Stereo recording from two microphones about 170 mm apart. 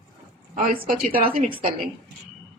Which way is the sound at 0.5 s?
50° right (ahead or behind).